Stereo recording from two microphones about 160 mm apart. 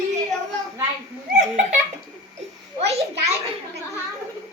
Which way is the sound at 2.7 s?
40° right (ahead or behind).